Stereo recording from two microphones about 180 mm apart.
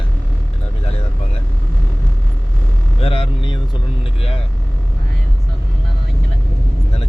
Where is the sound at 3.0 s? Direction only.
30° left (ahead or behind).